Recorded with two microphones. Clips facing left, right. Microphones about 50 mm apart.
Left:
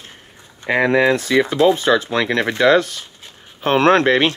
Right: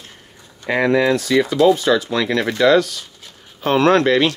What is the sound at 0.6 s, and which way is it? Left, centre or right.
Speech, left.